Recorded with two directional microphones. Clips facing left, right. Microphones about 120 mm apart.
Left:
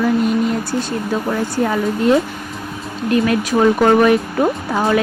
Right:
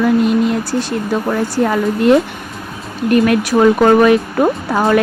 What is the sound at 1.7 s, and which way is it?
Speech, 70° right (ahead or behind).